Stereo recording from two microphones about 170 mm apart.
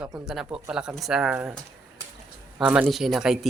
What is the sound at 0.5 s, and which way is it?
Speech, 5° right (ahead or behind).